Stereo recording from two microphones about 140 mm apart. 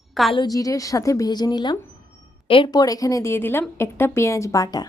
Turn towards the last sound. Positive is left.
turn(degrees=25)  # may be behind; listen again after turning